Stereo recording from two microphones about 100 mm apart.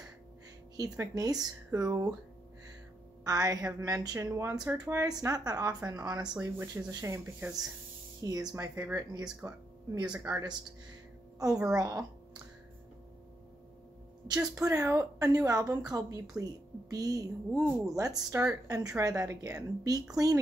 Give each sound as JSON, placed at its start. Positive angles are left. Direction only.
{"t": 0.7, "sound": "speech", "side_deg": -35}
{"t": 3.3, "sound": "speech", "side_deg": -35}
{"t": 6.6, "sound": "speech", "side_deg": -30}
{"t": 7.4, "sound": "speech", "side_deg": -20}
{"t": 8.2, "sound": "speech", "side_deg": -35}
{"t": 9.0, "sound": "speech", "side_deg": -45}
{"t": 11.6, "sound": "speech", "side_deg": -35}
{"t": 14.2, "sound": "a woman's voice", "side_deg": -40}
{"t": 17.6, "sound": "speech", "side_deg": -10}
{"t": 17.9, "sound": "speech", "side_deg": -35}